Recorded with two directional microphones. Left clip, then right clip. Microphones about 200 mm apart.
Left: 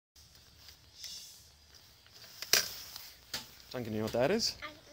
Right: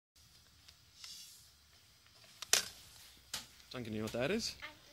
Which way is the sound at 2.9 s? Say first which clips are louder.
Left 10 dB; 50° left (ahead or behind).